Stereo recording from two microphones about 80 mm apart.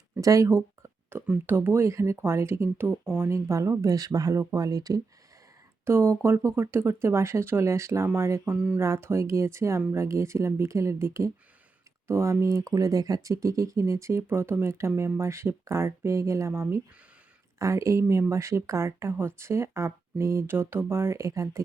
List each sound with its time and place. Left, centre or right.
0.2 s a sound: right
1.5 s speech: right
5.8 s speech: right
8.5 s speech: centre
8.8 s speech: right